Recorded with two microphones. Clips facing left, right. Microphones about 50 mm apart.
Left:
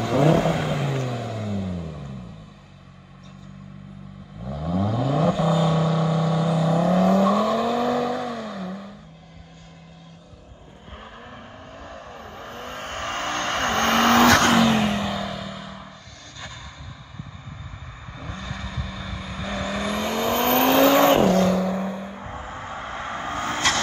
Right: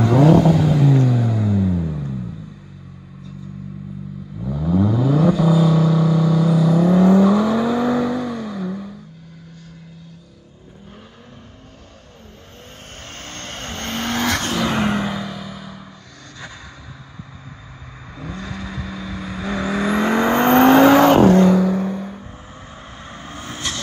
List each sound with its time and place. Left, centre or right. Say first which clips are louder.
0.4 s vehicle: right 7 dB; left
0.7 s vehicle: right 9 dB; left
0.9 s vehicle: right 9 dB; centre
4.5 s vehicle: right 6 dB; centre
12.6 s vehicle: left 9 dB; left
14.6 s vehicle: left 1 dB; centre
14.9 s vehicle: right 3 dB; centre
15.2 s vehicle: right 1 dB; centre
18.2 s vehicle: right 4 dB; centre
20.2 s vehicle: right 6 dB; right
21.5 s vehicle: right 6 dB; centre
22.2 s vehicle: left 5 dB; left